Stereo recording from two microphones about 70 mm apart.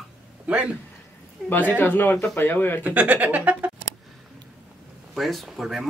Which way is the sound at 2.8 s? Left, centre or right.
Right.